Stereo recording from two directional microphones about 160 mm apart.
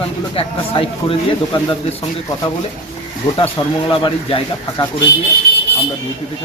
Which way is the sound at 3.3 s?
35° left (ahead or behind).